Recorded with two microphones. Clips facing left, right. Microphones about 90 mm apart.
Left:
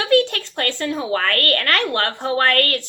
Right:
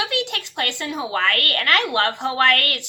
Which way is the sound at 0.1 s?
45° left (ahead or behind).